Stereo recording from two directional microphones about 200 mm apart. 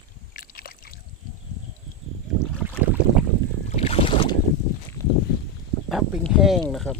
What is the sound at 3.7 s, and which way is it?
Boat, 30° left (ahead or behind).